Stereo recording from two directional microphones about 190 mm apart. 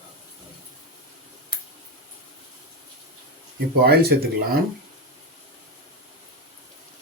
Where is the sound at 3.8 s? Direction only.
55° right (ahead or behind).